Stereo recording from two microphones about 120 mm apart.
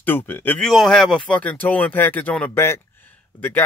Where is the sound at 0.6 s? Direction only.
Centre (ahead or behind).